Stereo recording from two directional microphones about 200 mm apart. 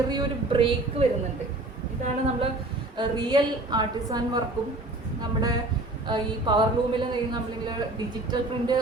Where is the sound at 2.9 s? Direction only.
20° right (ahead or behind).